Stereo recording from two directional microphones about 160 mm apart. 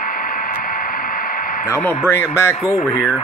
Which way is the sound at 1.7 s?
15° left (ahead or behind).